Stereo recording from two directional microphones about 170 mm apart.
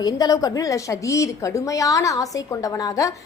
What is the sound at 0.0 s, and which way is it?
A woman's voice, 20° left (ahead or behind).